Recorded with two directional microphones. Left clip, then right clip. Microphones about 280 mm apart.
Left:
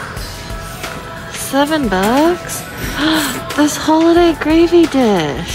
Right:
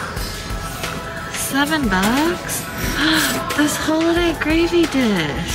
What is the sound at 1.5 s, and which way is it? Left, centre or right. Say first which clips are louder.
Speech: left 4 dB; centre.